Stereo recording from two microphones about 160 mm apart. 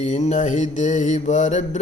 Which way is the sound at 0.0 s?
45° left (ahead or behind).